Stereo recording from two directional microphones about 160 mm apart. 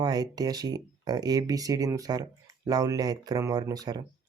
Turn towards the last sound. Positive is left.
turn(degrees=-25)  # may be behind; listen again after turning